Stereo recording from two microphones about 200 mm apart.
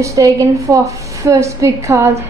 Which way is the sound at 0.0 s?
15° right (ahead or behind).